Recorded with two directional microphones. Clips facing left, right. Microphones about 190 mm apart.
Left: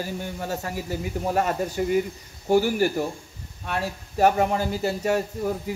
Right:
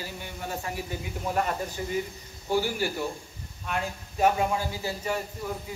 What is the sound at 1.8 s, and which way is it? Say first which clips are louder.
Speech: left 9 dB; 60° left (ahead or behind).